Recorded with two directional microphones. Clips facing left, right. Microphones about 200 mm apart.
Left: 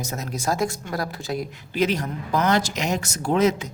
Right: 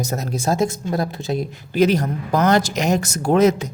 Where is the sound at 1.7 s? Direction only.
40° right (ahead or behind).